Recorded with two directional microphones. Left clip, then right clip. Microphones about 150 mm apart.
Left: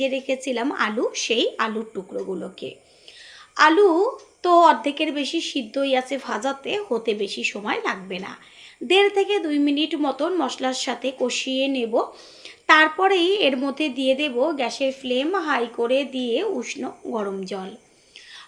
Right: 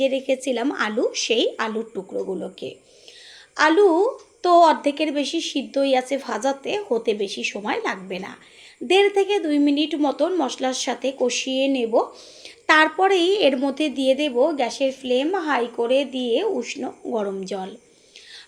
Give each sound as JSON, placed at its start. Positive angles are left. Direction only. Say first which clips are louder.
{"t": 0.0, "sound": "a woman's voice", "louder": "right 3 dB", "side_deg": -35}